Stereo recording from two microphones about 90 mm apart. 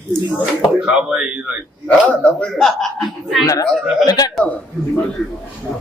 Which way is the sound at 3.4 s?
40° left (ahead or behind).